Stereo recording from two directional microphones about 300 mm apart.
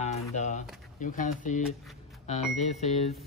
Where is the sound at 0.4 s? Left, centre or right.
Left.